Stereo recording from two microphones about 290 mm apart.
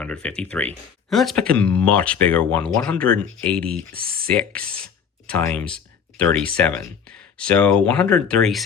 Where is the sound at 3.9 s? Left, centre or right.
Right.